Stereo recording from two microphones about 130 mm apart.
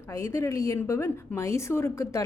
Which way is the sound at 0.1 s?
20° left (ahead or behind).